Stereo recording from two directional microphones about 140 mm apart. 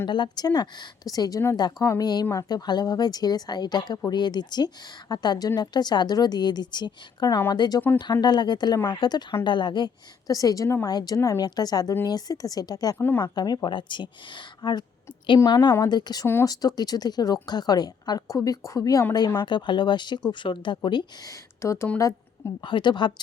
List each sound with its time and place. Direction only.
0.0 s a woman's voice: 30° left (ahead or behind)
13.0 s a woman's voice: 15° left (ahead or behind)
13.2 s a woman's voice: 30° left (ahead or behind)
16.2 s a woman's voice: 20° left (ahead or behind)
21.6 s a woman's voice: 20° left (ahead or behind)
22.6 s a woman's voice: 35° left (ahead or behind)